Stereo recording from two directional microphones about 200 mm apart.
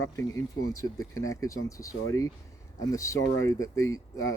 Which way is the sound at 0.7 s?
15° left (ahead or behind).